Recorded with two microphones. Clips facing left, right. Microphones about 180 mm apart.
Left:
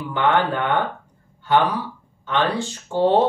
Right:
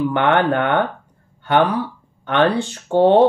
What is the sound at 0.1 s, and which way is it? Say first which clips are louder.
Speech: right 3 dB; 65° right (ahead or behind).